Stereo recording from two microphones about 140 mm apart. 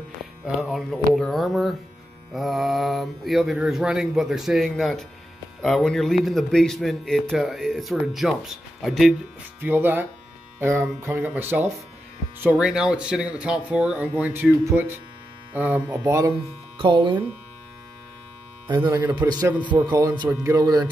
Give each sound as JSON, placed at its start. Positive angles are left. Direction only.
{"t": 0.6, "sound": "speech", "side_deg": 0}
{"t": 9.6, "sound": "speech", "side_deg": -15}
{"t": 16.7, "sound": "speech", "side_deg": -35}
{"t": 18.9, "sound": "speech", "side_deg": -30}